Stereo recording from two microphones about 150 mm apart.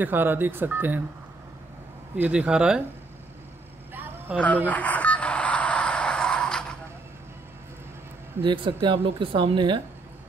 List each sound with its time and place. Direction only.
0.0 s speech: 10° right (ahead or behind)
2.1 s speech: 10° right (ahead or behind)
3.9 s vehicle: 10° right (ahead or behind)
4.6 s a sound: 10° left (ahead or behind)
8.4 s speech: 35° right (ahead or behind)